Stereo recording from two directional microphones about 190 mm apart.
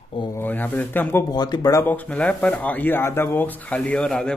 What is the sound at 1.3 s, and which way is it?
Speech, 20° left (ahead or behind).